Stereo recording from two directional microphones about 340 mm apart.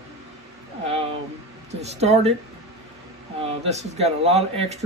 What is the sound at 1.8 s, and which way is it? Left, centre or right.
Speech, centre.